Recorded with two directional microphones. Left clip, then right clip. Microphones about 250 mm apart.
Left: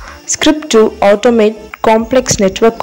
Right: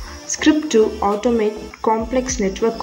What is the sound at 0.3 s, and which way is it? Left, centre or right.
A woman's voice, left.